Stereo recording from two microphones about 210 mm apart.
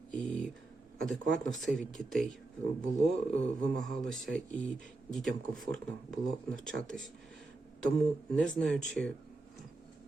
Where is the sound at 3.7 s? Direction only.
Centre (ahead or behind).